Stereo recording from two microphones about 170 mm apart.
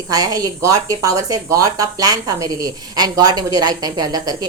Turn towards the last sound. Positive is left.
turn(degrees=-20)  # may be behind; listen again after turning